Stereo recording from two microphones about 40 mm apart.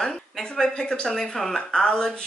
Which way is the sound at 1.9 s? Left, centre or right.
Left.